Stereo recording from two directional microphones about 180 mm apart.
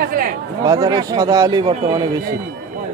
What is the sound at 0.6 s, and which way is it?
Speech, 20° right (ahead or behind).